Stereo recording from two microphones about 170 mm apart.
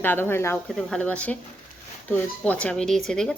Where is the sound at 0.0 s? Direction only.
10° left (ahead or behind).